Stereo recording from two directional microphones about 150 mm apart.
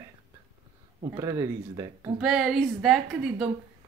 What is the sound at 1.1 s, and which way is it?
Speech, 20° right (ahead or behind).